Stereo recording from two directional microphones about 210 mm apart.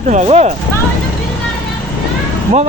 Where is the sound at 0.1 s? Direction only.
30° right (ahead or behind).